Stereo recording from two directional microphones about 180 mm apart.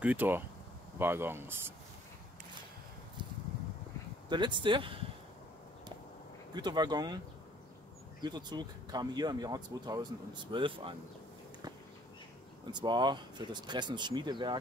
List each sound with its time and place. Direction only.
0.0 s speech: 10° right (ahead or behind)
4.3 s speech: 25° right (ahead or behind)
6.5 s speech: 25° right (ahead or behind)
8.2 s speech: 25° right (ahead or behind)
12.7 s speech: 25° right (ahead or behind)